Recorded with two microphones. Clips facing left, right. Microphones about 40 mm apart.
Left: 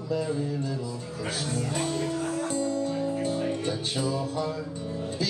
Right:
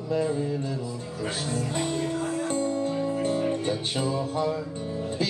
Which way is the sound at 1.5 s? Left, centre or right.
Right.